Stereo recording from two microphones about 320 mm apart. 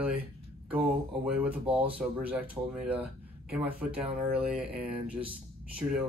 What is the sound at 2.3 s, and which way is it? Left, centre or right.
Speech, centre.